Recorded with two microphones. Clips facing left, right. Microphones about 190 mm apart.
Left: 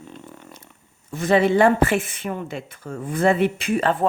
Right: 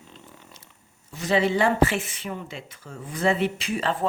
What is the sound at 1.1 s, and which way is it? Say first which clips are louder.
Speech: left 5 dB; 50° left (ahead or behind).